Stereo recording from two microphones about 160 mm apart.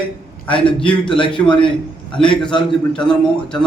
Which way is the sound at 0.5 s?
5° left (ahead or behind).